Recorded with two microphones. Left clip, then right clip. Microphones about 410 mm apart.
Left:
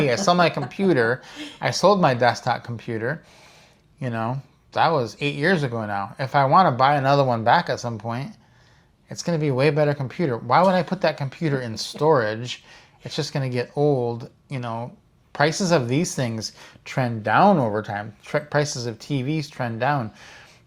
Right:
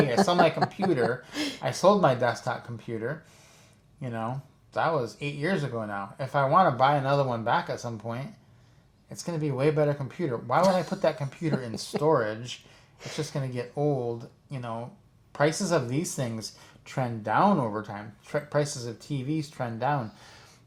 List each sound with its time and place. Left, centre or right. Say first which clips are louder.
0.1 s speech: left 3 dB; left